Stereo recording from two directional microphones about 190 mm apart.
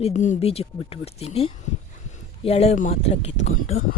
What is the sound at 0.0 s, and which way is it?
Speech, 40° left (ahead or behind).